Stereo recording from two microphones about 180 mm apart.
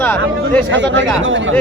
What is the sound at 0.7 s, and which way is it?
Speech, 90° right.